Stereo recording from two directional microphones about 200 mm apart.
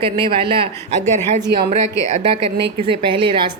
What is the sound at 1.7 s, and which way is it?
A woman's voice, 35° right (ahead or behind).